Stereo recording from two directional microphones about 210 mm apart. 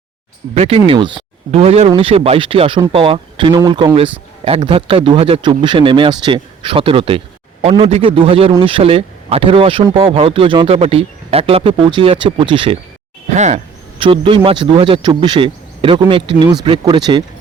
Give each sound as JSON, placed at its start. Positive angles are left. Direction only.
{"t": 0.5, "sound": "a man's voice", "side_deg": -30}